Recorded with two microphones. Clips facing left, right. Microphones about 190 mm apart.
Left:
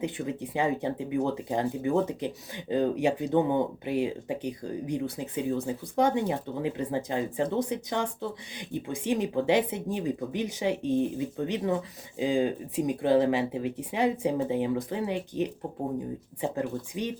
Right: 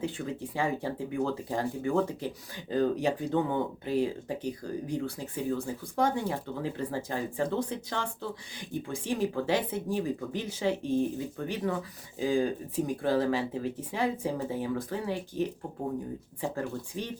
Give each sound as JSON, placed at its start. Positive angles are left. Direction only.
{"t": 0.0, "sound": "speech", "side_deg": 20}